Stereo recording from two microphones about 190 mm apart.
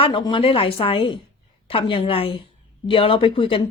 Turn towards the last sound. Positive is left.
turn(degrees=25)  # may be behind; listen again after turning